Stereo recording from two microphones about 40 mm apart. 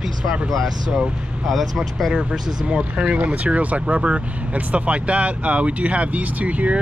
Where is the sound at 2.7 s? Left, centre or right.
Right.